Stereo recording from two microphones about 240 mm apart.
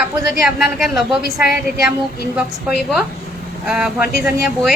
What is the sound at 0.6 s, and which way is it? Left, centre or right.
Speech, centre.